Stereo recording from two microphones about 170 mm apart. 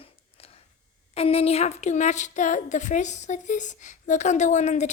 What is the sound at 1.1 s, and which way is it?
A woman's voice, 35° left (ahead or behind).